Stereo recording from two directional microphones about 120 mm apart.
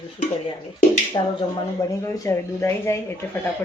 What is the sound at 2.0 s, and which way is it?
Speech, 25° left (ahead or behind).